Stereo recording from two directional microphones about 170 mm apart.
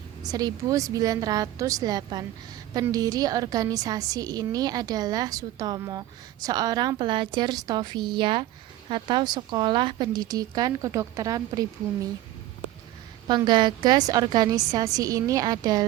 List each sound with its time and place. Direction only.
0.2 s a woman's voice: 20° right (ahead or behind)
13.2 s a woman's voice: 25° right (ahead or behind)